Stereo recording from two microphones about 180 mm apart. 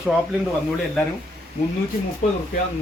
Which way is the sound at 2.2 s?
45° left (ahead or behind).